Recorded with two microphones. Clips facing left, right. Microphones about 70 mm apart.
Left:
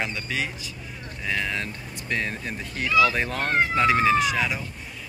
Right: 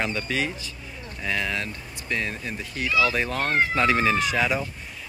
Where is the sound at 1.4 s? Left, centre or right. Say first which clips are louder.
Even; left.